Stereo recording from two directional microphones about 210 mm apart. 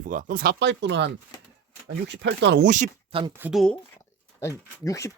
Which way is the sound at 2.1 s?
55° right (ahead or behind).